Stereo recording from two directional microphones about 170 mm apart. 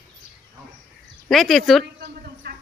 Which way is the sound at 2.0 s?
65° right (ahead or behind).